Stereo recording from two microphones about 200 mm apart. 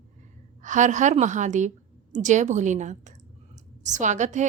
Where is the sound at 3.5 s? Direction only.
35° right (ahead or behind).